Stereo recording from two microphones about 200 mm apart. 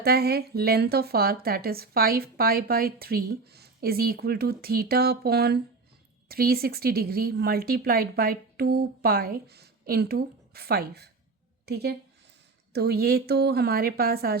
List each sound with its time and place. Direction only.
0.0 s a woman's voice: 50° right (ahead or behind)